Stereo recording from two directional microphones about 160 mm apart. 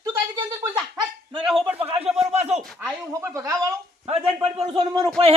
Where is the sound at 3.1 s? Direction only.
20° right (ahead or behind).